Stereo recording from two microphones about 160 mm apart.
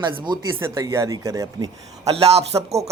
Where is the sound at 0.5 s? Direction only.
15° right (ahead or behind).